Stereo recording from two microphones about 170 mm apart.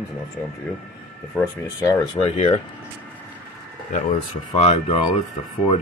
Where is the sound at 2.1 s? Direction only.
40° left (ahead or behind).